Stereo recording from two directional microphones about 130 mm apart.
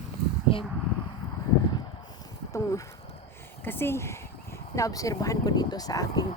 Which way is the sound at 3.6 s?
15° left (ahead or behind).